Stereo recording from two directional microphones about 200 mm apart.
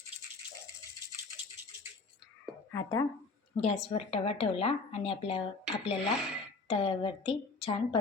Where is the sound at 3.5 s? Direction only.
30° left (ahead or behind).